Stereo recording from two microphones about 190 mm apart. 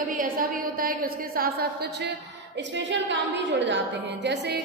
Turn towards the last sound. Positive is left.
turn(degrees=-65)  # may be behind; listen again after turning